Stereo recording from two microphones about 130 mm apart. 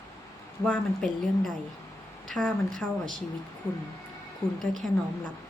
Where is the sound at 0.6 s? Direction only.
5° left (ahead or behind).